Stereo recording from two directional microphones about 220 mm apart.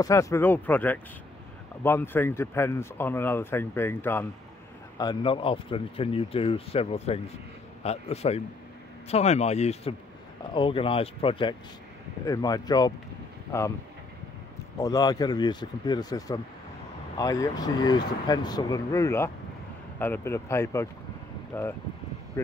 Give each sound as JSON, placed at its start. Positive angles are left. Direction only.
{"t": 0.0, "sound": "speech", "side_deg": 15}
{"t": 4.9, "sound": "speech", "side_deg": 20}
{"t": 14.8, "sound": "speech", "side_deg": 15}